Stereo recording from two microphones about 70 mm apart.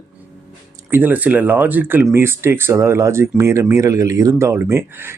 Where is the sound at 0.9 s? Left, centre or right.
Right.